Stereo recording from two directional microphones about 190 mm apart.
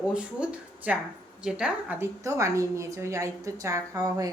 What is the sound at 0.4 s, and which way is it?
A woman's voice, 5° right (ahead or behind).